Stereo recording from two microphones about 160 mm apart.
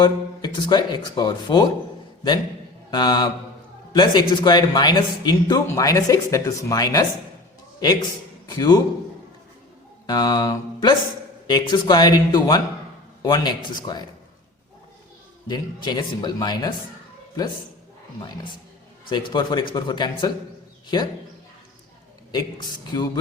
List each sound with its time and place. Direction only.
0.0 s speech: 30° left (ahead or behind)
2.9 s speech: 25° left (ahead or behind)
10.1 s speech: 25° left (ahead or behind)
15.4 s speech: 25° left (ahead or behind)
19.0 s speech: 30° left (ahead or behind)
22.3 s speech: 25° left (ahead or behind)